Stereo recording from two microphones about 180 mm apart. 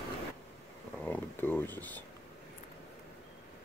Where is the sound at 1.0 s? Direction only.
10° left (ahead or behind).